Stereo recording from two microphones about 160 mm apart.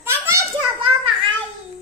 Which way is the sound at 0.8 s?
35° right (ahead or behind).